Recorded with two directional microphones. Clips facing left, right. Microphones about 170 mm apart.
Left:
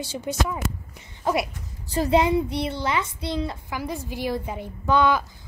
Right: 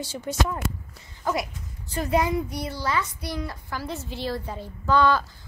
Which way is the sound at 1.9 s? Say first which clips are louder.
Left 4 dB; 30° left (ahead or behind).